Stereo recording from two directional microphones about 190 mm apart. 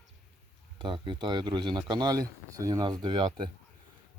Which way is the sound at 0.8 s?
25° right (ahead or behind).